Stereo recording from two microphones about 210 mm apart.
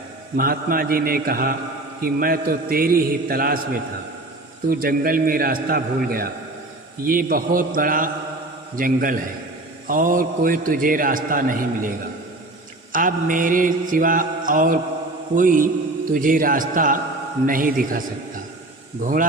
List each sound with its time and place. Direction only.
0.3 s a man's voice: 45° right (ahead or behind)
4.7 s a man's voice: 45° right (ahead or behind)